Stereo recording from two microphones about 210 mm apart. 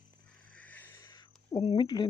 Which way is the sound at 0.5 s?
5° left (ahead or behind).